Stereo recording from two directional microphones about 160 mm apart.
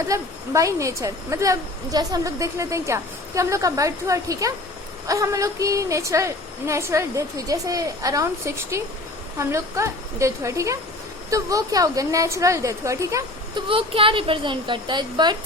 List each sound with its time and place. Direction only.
0.1 s a woman's voice: 20° right (ahead or behind)
13.7 s a woman's voice: 35° right (ahead or behind)